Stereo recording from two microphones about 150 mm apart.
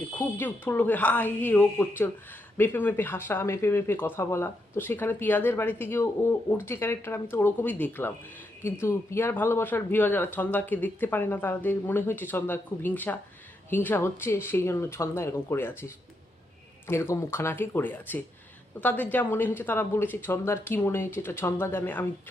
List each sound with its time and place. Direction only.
0.2 s speech: 10° left (ahead or behind)